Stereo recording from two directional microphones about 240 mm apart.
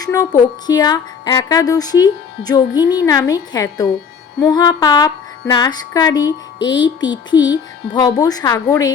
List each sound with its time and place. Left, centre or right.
0.0 s a woman's voice: centre